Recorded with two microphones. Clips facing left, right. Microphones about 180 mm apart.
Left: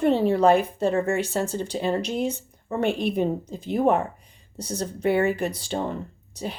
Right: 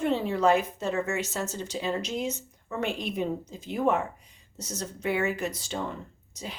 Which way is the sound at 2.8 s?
60° left (ahead or behind).